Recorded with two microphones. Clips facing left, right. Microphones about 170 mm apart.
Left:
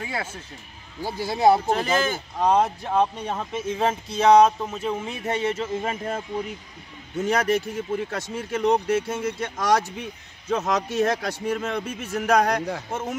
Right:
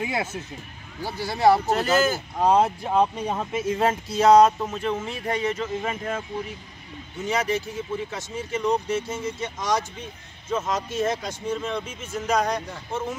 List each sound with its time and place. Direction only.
0.0 s speech: 20° right (ahead or behind)
1.0 s speech: 20° left (ahead or behind)
1.7 s speech: 5° right (ahead or behind)
4.8 s speech: 15° left (ahead or behind); by 6.2 s 30° left (ahead or behind)
7.2 s speech: 55° left (ahead or behind)